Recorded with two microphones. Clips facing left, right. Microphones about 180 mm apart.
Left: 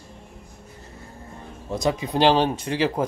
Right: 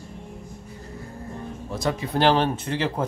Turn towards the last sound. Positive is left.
turn(degrees=15)  # may be behind; listen again after turning